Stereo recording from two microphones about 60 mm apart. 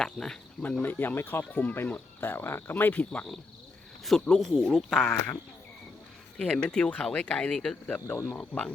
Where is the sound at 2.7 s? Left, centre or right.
Left.